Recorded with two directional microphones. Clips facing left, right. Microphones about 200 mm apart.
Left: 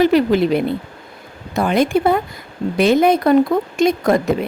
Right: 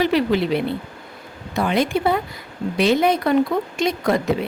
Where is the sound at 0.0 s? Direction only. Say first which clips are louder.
Left 5 dB; 45° left (ahead or behind).